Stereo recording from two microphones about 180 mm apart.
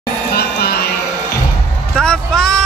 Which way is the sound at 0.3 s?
60° left (ahead or behind).